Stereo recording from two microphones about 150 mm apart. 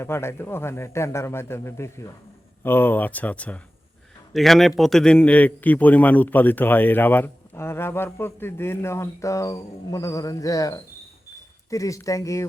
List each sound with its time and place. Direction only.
0.0 s a man's voice: 15° left (ahead or behind)